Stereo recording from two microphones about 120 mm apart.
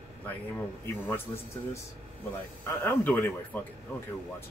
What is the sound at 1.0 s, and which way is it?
Speech, 20° left (ahead or behind).